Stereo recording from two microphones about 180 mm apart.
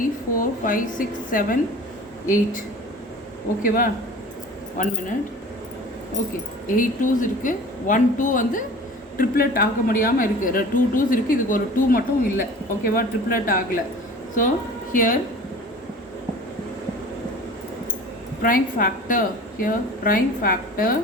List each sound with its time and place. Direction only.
0.0 s a woman's voice: 50° left (ahead or behind)
4.8 s a woman's voice: 45° left (ahead or behind)
6.2 s a woman's voice: 45° left (ahead or behind)
14.9 s a woman's voice: 50° left (ahead or behind)
18.4 s a woman's voice: 50° left (ahead or behind)